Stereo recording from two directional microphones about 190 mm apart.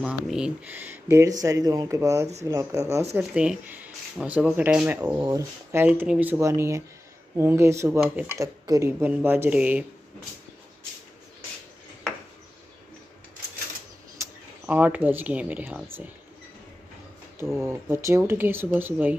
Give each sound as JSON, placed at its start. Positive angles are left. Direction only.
{"t": 0.0, "sound": "speech", "side_deg": -5}
{"t": 14.7, "sound": "speech", "side_deg": -10}
{"t": 17.6, "sound": "speech", "side_deg": -15}